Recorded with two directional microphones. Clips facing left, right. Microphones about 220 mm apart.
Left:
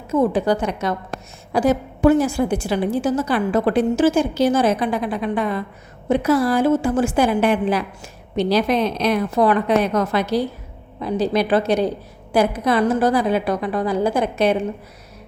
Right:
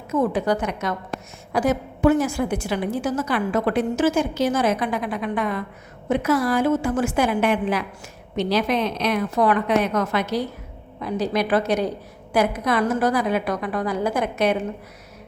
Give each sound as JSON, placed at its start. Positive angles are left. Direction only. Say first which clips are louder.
{"t": 0.1, "sound": "a woman's voice", "louder": "left 3 dB", "side_deg": 30}